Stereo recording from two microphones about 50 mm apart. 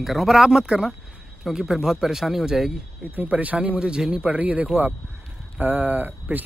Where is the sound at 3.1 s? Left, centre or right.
Right.